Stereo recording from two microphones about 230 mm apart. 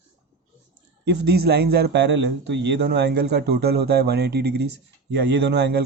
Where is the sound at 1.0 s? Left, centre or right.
Right.